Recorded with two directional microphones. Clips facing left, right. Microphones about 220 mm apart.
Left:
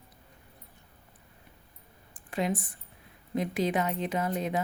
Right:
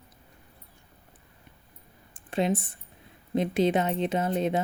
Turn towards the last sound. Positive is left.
turn(degrees=-25)  # may be behind; listen again after turning